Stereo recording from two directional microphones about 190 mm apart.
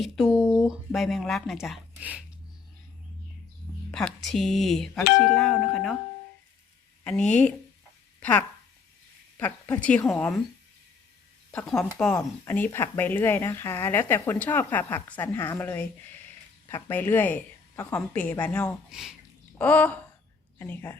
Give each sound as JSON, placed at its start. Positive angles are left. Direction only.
{"t": 0.4, "sound": "a sound", "side_deg": 15}
{"t": 0.7, "sound": "speech", "side_deg": 0}
{"t": 3.9, "sound": "speech", "side_deg": 0}
{"t": 7.0, "sound": "speech", "side_deg": 5}
{"t": 11.5, "sound": "speech", "side_deg": 5}